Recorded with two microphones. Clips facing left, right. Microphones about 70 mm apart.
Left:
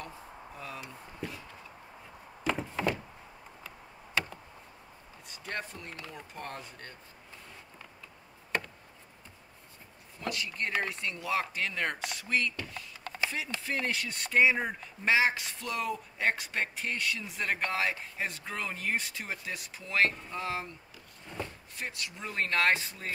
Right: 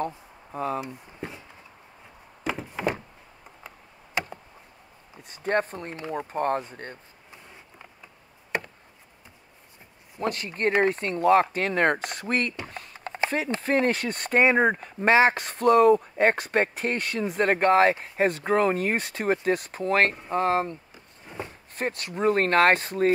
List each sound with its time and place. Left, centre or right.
0.0 s speech: right
1.2 s a sound: right
2.7 s door: right
3.6 s tick: right
5.3 s speech: right
8.5 s chop: centre
10.2 s speech: right
12.6 s a sound: right
13.0 s a sound: right
13.6 s speech: right
21.3 s a sound: centre
21.7 s speech: right